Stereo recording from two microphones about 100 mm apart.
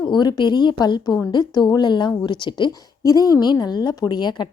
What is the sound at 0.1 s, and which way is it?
Speech, 45° left (ahead or behind).